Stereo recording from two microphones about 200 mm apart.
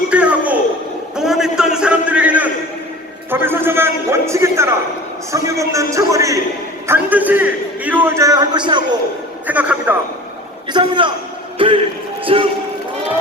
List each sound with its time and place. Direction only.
0.1 s a sound: 5° right (ahead or behind)
3.2 s a man's voice: 10° right (ahead or behind)
9.5 s a man's voice: 5° right (ahead or behind)
10.7 s a man's voice: 25° right (ahead or behind)